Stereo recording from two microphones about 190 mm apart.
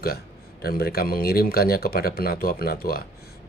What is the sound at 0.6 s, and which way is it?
Speech, 55° left (ahead or behind).